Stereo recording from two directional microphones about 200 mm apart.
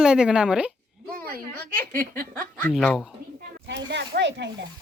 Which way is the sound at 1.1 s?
50° right (ahead or behind).